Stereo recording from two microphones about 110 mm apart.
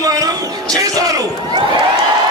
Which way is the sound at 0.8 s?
30° right (ahead or behind).